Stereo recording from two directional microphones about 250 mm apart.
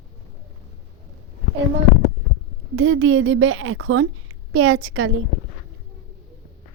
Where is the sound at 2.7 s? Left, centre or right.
Right.